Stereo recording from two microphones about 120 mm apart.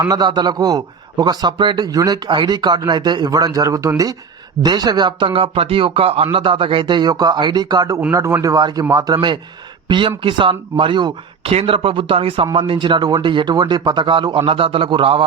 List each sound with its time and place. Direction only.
0.1 s a man's voice: 35° right (ahead or behind)
9.9 s a man's voice: 45° right (ahead or behind)